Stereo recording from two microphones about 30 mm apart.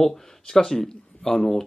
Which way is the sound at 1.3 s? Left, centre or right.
Centre.